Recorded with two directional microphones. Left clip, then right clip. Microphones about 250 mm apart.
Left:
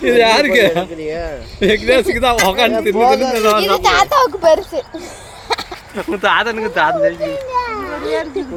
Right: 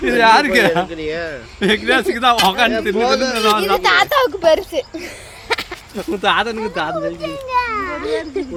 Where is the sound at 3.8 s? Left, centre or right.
Centre.